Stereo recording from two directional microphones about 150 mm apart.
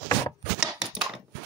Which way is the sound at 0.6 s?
5° right (ahead or behind).